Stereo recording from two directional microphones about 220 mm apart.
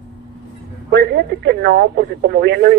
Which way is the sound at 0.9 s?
50° right (ahead or behind).